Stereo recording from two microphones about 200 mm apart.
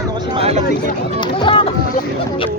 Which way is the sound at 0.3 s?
30° right (ahead or behind).